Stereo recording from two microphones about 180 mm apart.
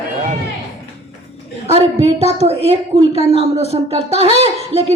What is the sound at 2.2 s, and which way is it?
Speech, 35° right (ahead or behind).